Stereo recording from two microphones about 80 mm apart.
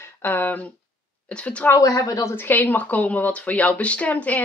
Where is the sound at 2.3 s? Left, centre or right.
Left.